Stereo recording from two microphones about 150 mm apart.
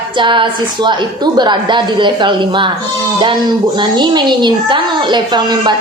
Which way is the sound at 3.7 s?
30° right (ahead or behind).